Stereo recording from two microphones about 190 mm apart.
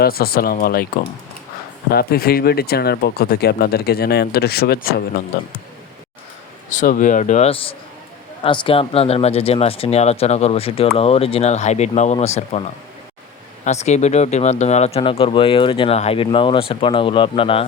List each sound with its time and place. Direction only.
0.0 s speech: 55° left (ahead or behind)
1.9 s speech: 55° left (ahead or behind)
6.7 s speech: 40° left (ahead or behind)
13.7 s speech: 35° left (ahead or behind)